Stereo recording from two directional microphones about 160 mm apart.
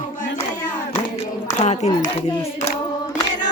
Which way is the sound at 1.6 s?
45° left (ahead or behind).